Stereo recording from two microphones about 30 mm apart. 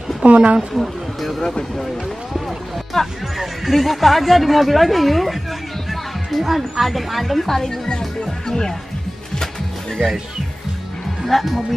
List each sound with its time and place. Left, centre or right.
0.2 s a woman's voice: right
0.7 s speech: centre
1.4 s speech: centre
2.9 s speech: centre
3.3 s speech: centre
7.4 s speech: centre
11.2 s speech: centre